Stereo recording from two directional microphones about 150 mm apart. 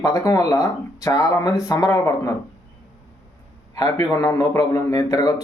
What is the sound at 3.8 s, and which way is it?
Speech, 25° left (ahead or behind).